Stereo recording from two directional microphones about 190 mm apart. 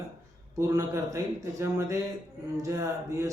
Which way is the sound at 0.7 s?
15° right (ahead or behind).